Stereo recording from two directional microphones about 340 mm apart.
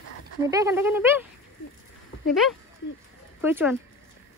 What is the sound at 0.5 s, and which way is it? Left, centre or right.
Speech, centre.